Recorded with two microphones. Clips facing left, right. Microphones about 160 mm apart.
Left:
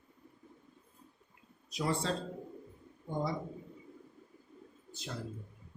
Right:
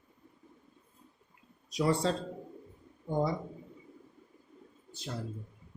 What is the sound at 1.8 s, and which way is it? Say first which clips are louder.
Speech: right 6 dB; 35° right (ahead or behind).